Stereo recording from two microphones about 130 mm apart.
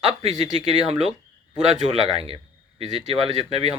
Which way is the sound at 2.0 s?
45° right (ahead or behind).